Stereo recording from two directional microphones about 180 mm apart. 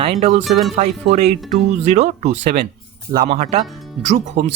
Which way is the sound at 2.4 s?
65° right (ahead or behind).